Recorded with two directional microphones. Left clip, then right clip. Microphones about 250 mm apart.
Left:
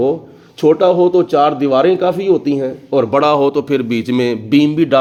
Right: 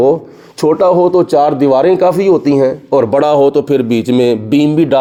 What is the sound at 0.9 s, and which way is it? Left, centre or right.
A man's voice, centre.